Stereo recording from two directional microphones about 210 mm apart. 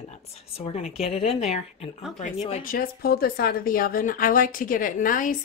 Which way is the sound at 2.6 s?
45° left (ahead or behind).